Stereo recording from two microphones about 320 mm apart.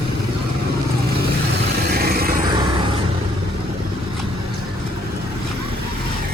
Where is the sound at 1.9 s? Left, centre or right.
Right.